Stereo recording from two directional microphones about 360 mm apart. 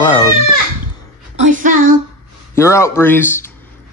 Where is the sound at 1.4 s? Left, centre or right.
Right.